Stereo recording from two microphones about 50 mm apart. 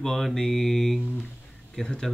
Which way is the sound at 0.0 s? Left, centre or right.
Centre.